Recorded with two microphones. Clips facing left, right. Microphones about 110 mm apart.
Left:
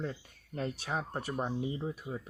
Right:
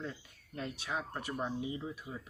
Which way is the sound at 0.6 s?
40° left (ahead or behind).